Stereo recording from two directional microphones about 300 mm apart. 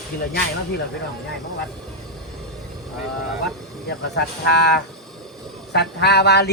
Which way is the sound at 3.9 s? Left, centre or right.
Left.